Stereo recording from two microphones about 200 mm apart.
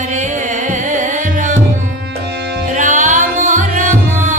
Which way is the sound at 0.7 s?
40° right (ahead or behind).